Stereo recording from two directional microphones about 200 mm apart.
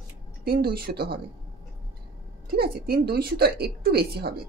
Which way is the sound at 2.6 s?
50° right (ahead or behind).